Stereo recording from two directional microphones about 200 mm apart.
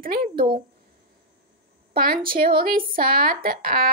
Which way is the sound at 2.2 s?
45° right (ahead or behind).